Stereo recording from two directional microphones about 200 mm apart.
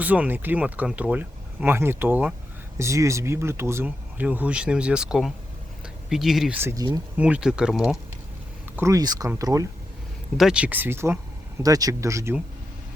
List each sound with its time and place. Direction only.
0.0 s speech: 10° right (ahead or behind)
8.7 s speech: 15° right (ahead or behind)
10.3 s speech: 5° right (ahead or behind)